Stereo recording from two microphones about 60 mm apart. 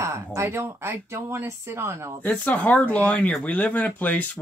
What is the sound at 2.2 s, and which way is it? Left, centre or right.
Speech, left.